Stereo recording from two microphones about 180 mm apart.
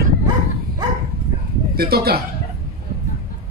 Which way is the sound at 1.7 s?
60° right (ahead or behind).